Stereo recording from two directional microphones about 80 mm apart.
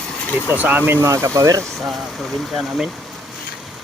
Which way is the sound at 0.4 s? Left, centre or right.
Right.